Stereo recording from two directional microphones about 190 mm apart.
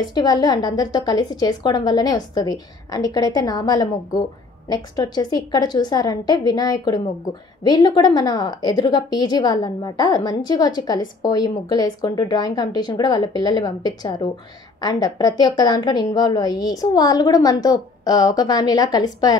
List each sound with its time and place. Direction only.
0.1 s a woman's voice: 20° left (ahead or behind)